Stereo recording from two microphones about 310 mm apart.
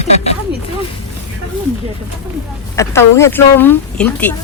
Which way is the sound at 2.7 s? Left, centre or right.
Centre.